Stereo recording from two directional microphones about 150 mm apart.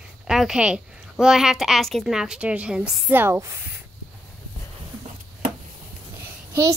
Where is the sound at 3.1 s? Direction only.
15° right (ahead or behind).